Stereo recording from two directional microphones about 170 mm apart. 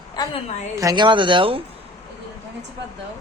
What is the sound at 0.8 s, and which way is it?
Speech, 25° right (ahead or behind).